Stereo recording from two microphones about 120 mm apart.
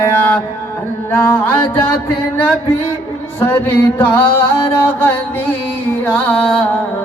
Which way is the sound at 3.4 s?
20° left (ahead or behind).